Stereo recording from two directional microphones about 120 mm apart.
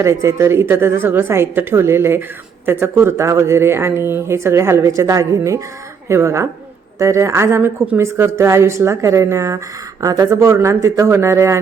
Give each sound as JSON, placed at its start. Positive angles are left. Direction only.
{"t": 0.0, "sound": "speech", "side_deg": -25}